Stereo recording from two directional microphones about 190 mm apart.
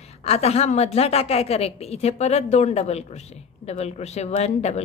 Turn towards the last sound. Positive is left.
turn(degrees=35)  # may be behind; listen again after turning